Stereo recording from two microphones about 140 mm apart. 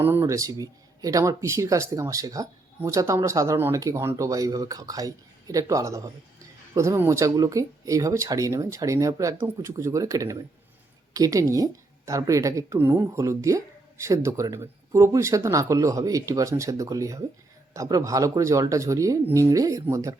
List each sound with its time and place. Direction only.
0.0 s speech: 15° right (ahead or behind)